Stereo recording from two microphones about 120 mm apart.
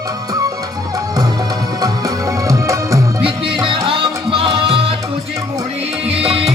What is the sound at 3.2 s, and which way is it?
Music, 45° right (ahead or behind).